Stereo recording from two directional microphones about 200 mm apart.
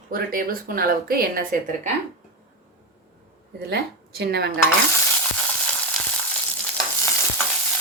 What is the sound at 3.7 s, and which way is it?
Speech, 55° right (ahead or behind).